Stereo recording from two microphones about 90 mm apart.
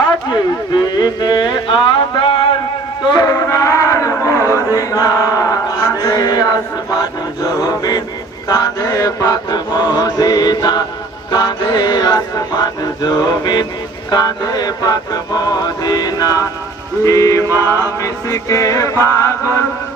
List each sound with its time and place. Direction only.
0.3 s music: 55° left (ahead or behind)
3.1 s music: 50° left (ahead or behind)
3.3 s a sound: 35° left (ahead or behind)
6.0 s chant: 40° left (ahead or behind)
8.4 s mantra: 50° left (ahead or behind)
17.0 s music: 40° left (ahead or behind)